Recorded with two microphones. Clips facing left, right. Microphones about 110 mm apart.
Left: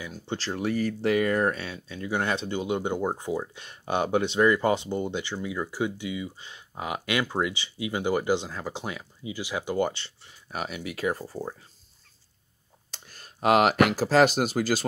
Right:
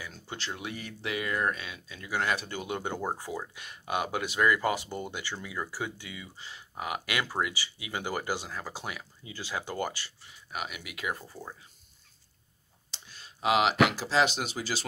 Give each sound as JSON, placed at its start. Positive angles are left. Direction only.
{"t": 0.3, "sound": "speech", "side_deg": 35}
{"t": 12.9, "sound": "speech", "side_deg": 50}